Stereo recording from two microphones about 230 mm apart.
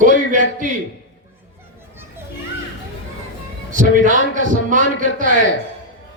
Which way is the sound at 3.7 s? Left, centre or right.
Right.